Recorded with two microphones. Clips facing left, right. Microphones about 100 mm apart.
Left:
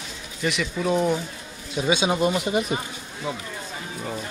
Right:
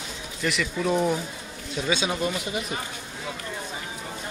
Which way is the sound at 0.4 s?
5° left (ahead or behind).